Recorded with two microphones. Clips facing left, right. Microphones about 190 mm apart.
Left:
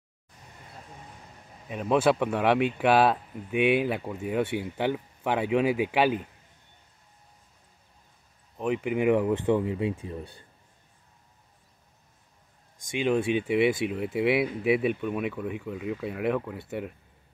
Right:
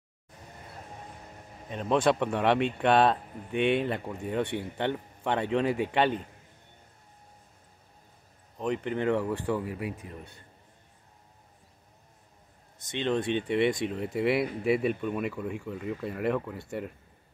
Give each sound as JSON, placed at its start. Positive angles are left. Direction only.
{"t": 1.7, "sound": "speech", "side_deg": 5}
{"t": 8.5, "sound": "speech", "side_deg": 5}
{"t": 12.7, "sound": "speech", "side_deg": 10}